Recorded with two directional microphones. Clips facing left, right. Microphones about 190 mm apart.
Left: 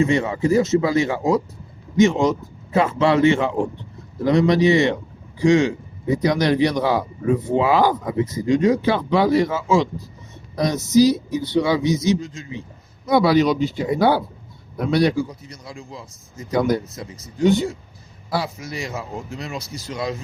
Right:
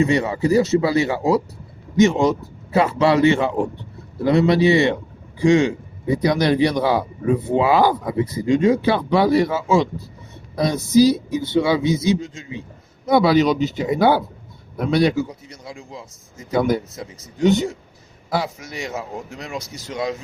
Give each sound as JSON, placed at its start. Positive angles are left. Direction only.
{"t": 0.0, "sound": "speech", "side_deg": -35}
{"t": 2.7, "sound": "a man's voice", "side_deg": -35}